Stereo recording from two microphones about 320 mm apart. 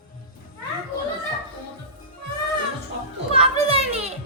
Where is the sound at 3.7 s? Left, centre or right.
Centre.